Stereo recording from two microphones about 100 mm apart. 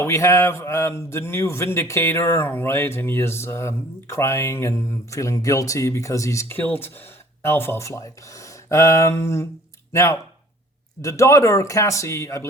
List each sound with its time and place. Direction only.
0.0 s a man's voice: 30° left (ahead or behind)